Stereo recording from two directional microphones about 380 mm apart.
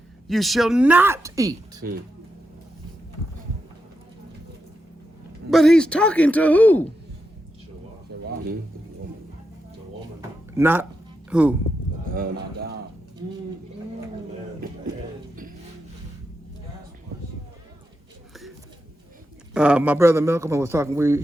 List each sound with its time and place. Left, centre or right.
0.3 s speech: centre
5.5 s speech: centre
10.2 s a sound: centre
11.3 s speech: centre
12.0 s a sound: right
19.5 s a man's voice: centre